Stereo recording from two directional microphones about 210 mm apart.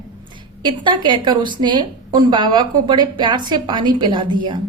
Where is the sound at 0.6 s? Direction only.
25° right (ahead or behind).